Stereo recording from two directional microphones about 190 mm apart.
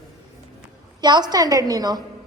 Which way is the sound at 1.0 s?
20° right (ahead or behind).